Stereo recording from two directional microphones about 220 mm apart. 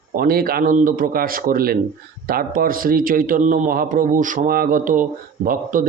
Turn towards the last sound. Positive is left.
turn(degrees=-40)  # may be behind; listen again after turning